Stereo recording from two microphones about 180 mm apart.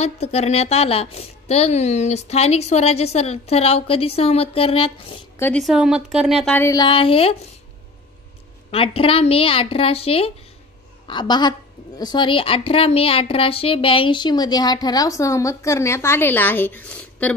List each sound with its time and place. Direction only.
0.0 s a woman's voice: 35° left (ahead or behind)
5.4 s a woman's voice: 5° left (ahead or behind)
6.5 s speech: 15° left (ahead or behind)
8.6 s a woman's voice: 30° left (ahead or behind); by 17.3 s 10° left (ahead or behind)